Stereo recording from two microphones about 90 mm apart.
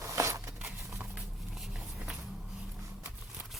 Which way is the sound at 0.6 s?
15° right (ahead or behind).